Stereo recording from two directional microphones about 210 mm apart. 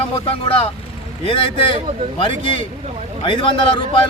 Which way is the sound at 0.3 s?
25° left (ahead or behind).